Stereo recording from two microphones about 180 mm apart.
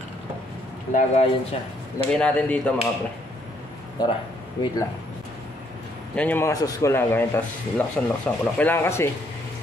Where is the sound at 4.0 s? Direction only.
25° left (ahead or behind).